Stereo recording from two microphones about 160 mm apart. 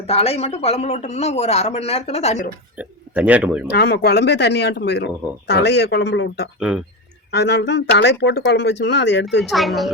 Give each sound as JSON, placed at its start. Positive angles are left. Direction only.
{"t": 0.1, "sound": "speech", "side_deg": 40}
{"t": 2.7, "sound": "speech", "side_deg": -10}
{"t": 3.7, "sound": "speech", "side_deg": 90}
{"t": 6.6, "sound": "a woman's voice", "side_deg": -5}
{"t": 7.3, "sound": "speech", "side_deg": 90}
{"t": 9.4, "sound": "a woman's voice", "side_deg": 0}